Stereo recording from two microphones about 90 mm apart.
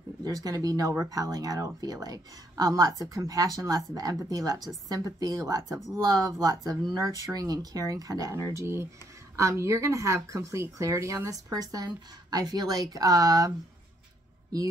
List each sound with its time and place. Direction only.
0.2 s speech: 45° right (ahead or behind)